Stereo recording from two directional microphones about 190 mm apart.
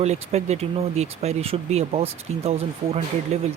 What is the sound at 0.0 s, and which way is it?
Speech, 35° right (ahead or behind).